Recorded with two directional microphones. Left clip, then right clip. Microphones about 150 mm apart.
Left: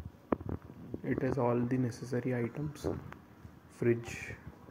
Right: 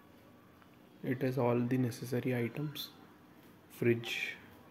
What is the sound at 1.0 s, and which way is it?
Speech, 15° right (ahead or behind).